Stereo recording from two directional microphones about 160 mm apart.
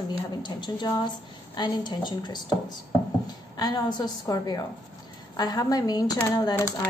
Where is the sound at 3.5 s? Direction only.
25° left (ahead or behind).